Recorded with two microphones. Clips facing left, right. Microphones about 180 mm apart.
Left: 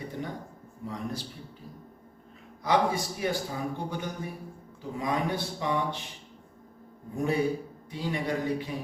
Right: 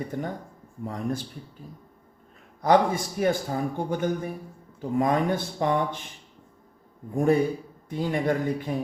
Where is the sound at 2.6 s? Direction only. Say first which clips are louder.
Right 5 dB; 50° right (ahead or behind).